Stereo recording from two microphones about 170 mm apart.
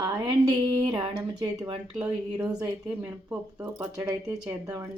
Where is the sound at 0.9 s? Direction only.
30° right (ahead or behind).